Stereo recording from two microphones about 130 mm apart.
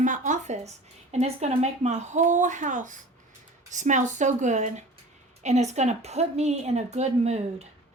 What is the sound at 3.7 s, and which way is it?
A woman's voice, 65° right (ahead or behind).